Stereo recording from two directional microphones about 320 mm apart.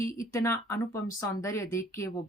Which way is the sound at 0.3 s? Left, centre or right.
Centre.